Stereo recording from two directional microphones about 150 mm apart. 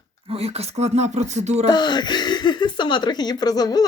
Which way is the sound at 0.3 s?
45° right (ahead or behind).